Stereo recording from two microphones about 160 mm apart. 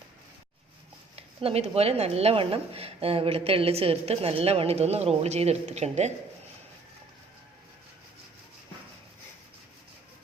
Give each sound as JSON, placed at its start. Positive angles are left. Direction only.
{"t": 1.1, "sound": "speech", "side_deg": -40}